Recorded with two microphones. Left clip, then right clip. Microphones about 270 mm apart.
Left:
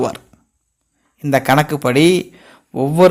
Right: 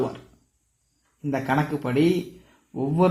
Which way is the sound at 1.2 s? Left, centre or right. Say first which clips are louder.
Left 11 dB; left.